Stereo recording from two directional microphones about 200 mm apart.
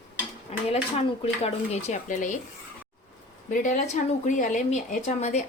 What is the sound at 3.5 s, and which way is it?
Speech, 40° left (ahead or behind).